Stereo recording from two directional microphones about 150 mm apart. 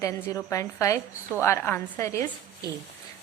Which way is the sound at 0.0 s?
20° left (ahead or behind).